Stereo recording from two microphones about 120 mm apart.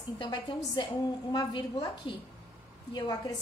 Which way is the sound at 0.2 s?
40° left (ahead or behind).